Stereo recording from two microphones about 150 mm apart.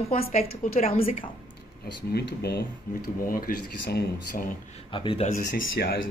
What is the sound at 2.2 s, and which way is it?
Speech, 90° left.